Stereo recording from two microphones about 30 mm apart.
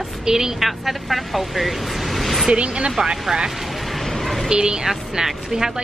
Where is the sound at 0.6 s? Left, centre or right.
Centre.